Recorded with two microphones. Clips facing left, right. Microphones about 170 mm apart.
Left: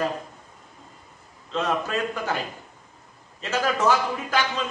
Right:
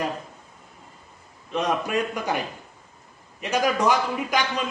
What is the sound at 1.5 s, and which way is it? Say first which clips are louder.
A man's voice: right 1 dB; 15° right (ahead or behind).